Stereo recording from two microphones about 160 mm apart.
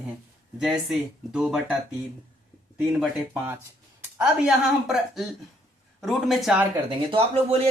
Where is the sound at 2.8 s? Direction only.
Centre (ahead or behind).